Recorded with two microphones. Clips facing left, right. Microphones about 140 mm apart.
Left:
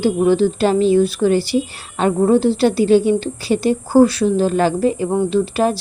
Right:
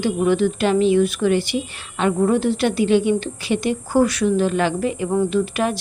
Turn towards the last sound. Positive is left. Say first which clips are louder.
# left 4 dB
turn(degrees=30)  # may be behind; listen again after turning